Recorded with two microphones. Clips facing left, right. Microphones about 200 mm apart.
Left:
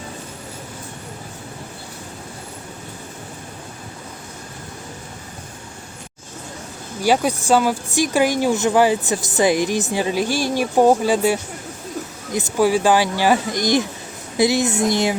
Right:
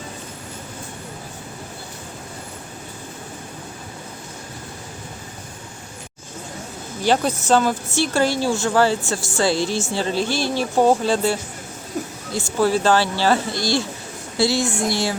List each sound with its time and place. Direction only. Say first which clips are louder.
7.0 s speech: left 1 dB; 10° left (ahead or behind)